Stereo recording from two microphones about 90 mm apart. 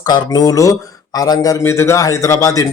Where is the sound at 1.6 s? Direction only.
30° left (ahead or behind).